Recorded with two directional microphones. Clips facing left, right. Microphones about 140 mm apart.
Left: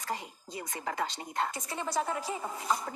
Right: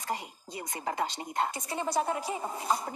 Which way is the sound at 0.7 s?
25° right (ahead or behind).